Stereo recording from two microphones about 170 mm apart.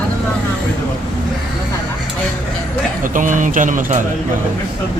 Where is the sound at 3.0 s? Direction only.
50° right (ahead or behind).